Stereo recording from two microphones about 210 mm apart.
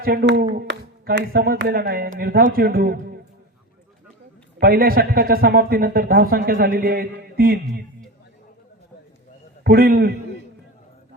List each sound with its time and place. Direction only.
0.0 s speech: 45° right (ahead or behind)
4.6 s speech: 45° right (ahead or behind)
9.6 s speech: 45° right (ahead or behind)